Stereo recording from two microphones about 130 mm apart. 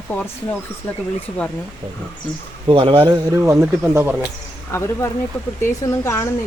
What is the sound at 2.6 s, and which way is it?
Speech, 40° right (ahead or behind).